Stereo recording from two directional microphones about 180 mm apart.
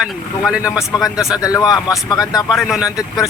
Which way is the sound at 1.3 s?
20° left (ahead or behind).